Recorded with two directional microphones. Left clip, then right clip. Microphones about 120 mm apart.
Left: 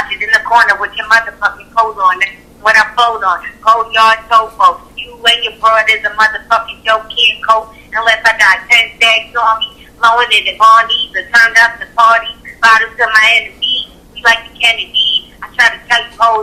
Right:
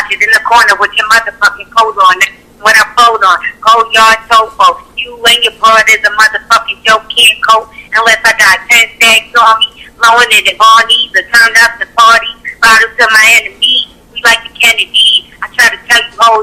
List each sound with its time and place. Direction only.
0.1 s a man's voice: 40° right (ahead or behind)